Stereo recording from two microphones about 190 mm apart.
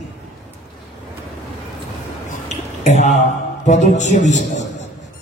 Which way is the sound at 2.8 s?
35° left (ahead or behind).